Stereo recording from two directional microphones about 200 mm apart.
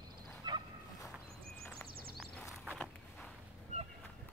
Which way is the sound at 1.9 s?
50° right (ahead or behind).